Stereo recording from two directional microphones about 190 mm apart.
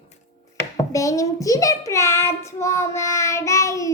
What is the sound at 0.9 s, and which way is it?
Child singing, 15° left (ahead or behind).